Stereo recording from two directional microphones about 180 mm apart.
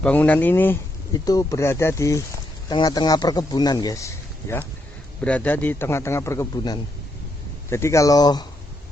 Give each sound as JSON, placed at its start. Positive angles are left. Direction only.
{"t": 0.0, "sound": "speech", "side_deg": 10}